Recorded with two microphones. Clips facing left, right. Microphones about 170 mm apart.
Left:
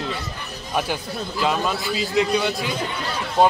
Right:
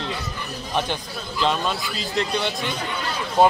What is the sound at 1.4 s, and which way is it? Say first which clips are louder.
Speech: left 1 dB; 5° left (ahead or behind).